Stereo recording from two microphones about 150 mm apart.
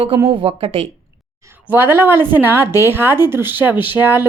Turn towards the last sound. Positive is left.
turn(degrees=-15)  # may be behind; listen again after turning